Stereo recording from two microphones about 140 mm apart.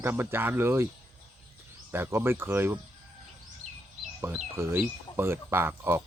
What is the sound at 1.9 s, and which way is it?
Speech, 15° right (ahead or behind).